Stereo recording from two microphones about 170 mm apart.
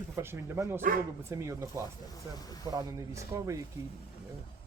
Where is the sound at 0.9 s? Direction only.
50° right (ahead or behind).